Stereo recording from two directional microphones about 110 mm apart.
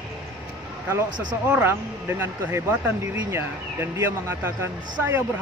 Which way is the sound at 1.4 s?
15° right (ahead or behind).